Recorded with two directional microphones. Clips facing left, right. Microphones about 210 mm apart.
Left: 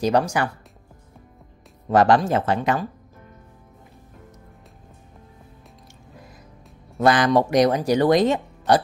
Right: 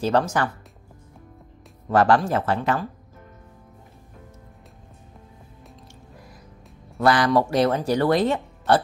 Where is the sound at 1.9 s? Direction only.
20° left (ahead or behind).